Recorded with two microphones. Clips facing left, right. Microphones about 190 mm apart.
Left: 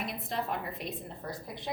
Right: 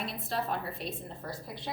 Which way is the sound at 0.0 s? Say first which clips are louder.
Right 1 dB; 20° left (ahead or behind).